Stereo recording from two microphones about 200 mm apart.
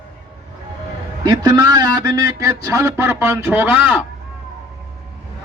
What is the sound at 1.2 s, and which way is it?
A man's voice, 20° right (ahead or behind).